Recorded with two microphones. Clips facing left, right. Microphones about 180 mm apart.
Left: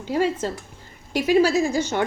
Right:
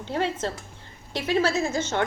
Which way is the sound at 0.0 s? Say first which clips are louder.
Left 4 dB; 5° left (ahead or behind).